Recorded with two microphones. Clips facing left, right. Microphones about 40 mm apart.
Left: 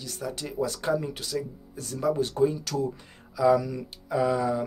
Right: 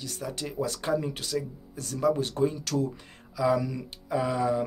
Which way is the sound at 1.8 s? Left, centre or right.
Right.